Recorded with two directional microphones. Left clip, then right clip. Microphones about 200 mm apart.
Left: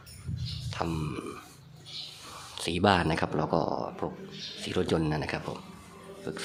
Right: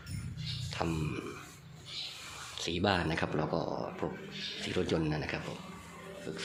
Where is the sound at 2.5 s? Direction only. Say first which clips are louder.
Left 6 dB; 20° left (ahead or behind).